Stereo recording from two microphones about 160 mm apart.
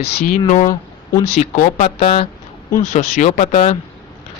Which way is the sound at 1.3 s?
45° left (ahead or behind).